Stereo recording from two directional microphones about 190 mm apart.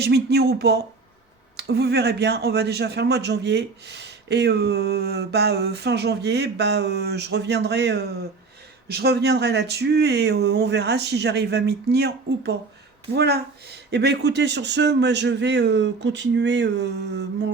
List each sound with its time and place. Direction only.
0.0 s speech: 60° right (ahead or behind)